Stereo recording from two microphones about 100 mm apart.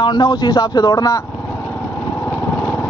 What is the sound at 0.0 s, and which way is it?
Speech, 45° left (ahead or behind).